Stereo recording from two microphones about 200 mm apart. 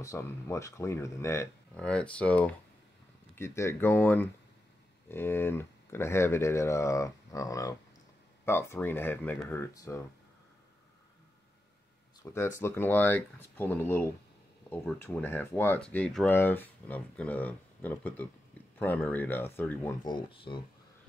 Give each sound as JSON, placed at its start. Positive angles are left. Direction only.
{"t": 0.0, "sound": "speech", "side_deg": 15}
{"t": 12.3, "sound": "speech", "side_deg": 10}
{"t": 20.0, "sound": "speech", "side_deg": 25}